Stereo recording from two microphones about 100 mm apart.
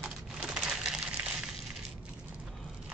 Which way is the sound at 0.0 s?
10° right (ahead or behind).